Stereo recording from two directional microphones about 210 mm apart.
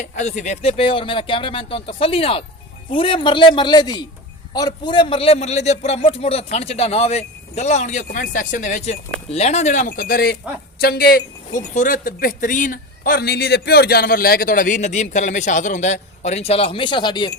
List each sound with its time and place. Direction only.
0.0 s speech: 35° left (ahead or behind)